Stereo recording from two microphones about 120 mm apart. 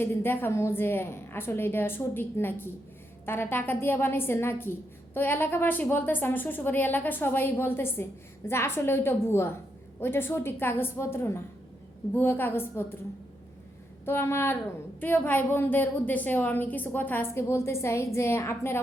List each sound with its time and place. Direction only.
0.0 s a woman's voice: 20° left (ahead or behind)
14.0 s a woman's voice: 20° left (ahead or behind)